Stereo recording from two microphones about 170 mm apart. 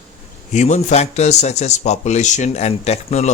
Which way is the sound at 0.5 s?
45° left (ahead or behind).